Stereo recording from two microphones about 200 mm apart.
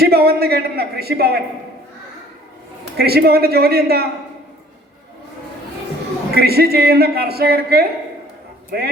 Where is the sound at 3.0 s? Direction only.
50° right (ahead or behind).